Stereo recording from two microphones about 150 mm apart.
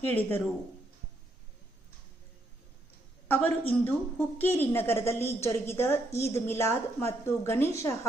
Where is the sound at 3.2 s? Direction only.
10° left (ahead or behind).